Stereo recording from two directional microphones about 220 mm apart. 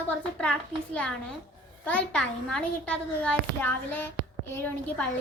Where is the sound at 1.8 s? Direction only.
5° left (ahead or behind).